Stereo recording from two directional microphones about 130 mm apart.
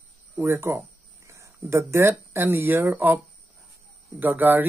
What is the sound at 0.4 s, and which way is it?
Speech, 20° right (ahead or behind).